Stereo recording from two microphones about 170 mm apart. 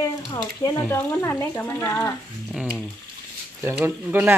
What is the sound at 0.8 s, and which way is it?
Speech, 10° left (ahead or behind).